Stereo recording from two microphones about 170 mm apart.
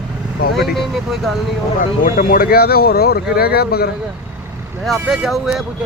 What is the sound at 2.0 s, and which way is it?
Speech, 55° left (ahead or behind).